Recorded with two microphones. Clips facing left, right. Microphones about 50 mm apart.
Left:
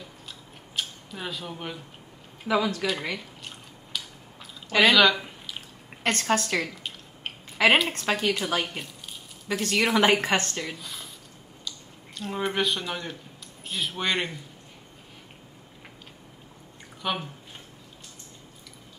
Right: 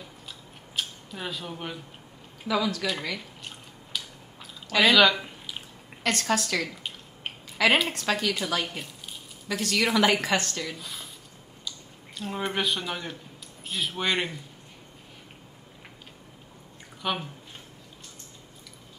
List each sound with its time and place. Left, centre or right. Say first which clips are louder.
0.7 s speech: even; centre
2.4 s speech: left 2 dB; left
3.2 s drip: even; centre
4.7 s speech: left 1 dB; centre
6.0 s a woman's voice: left 1 dB; left
8.6 s speech: even; centre
9.5 s a woman's voice: left 1 dB; left
10.8 s a sound: even; centre
12.2 s speech: left 2 dB; centre
17.0 s speech: even; centre